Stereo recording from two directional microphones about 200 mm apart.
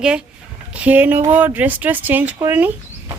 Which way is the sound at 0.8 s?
10° right (ahead or behind).